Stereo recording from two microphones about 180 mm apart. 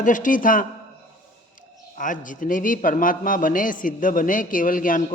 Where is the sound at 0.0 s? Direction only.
45° left (ahead or behind).